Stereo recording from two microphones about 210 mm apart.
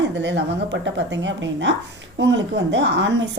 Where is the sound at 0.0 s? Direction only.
55° right (ahead or behind).